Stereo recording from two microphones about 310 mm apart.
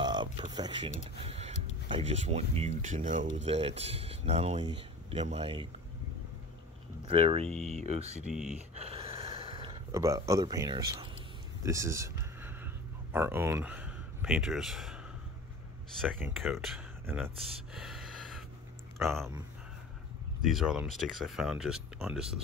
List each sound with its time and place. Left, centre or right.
0.0 s typing: centre
1.2 s a sound: centre
1.9 s speech: centre
7.1 s speech: centre
7.4 s speech: centre
7.8 s speech: right
8.3 s speech: centre
8.7 s gasp: centre
11.6 s a sound: centre
16.0 s speech: centre
20.4 s speech: centre